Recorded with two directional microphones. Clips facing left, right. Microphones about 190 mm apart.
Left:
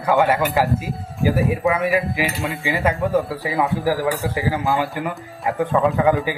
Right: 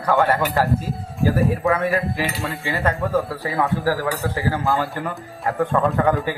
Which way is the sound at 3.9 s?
15° left (ahead or behind).